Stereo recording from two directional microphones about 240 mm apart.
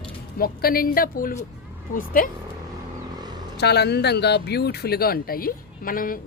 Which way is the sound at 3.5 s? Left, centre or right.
Left.